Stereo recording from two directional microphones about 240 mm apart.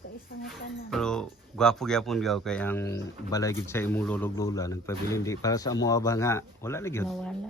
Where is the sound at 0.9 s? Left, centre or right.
Centre.